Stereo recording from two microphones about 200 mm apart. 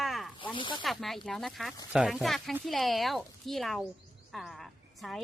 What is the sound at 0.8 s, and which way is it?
A woman's voice, centre (ahead or behind).